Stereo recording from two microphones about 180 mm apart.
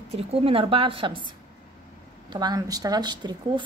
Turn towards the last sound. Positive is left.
turn(degrees=-25)  # may be behind; listen again after turning